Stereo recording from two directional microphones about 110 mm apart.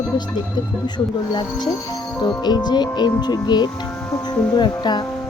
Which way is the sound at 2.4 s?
40° left (ahead or behind).